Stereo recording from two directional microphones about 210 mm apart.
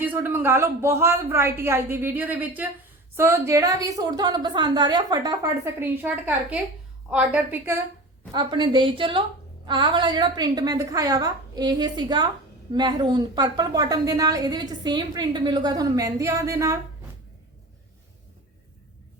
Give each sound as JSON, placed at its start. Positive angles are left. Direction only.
{"t": 0.0, "sound": "a woman's voice", "side_deg": -10}
{"t": 8.3, "sound": "a woman's voice", "side_deg": -20}